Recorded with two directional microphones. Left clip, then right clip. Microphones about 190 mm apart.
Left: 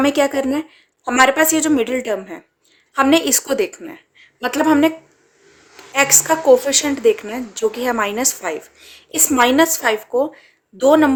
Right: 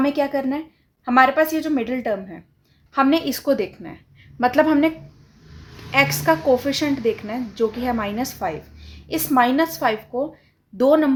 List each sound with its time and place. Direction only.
0.0 s a woman's voice: 50° left (ahead or behind)